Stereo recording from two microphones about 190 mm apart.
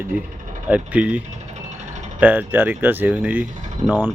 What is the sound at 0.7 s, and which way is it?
Speech, 5° right (ahead or behind).